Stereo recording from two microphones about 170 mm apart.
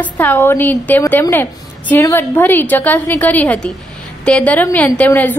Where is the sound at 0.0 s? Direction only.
10° left (ahead or behind).